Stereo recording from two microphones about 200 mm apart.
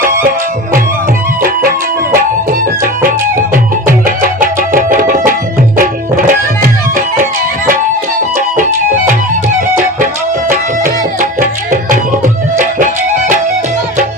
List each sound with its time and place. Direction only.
0.0 s music: 45° right (ahead or behind)
2.1 s music: 45° right (ahead or behind)
10.5 s tabla: 40° right (ahead or behind)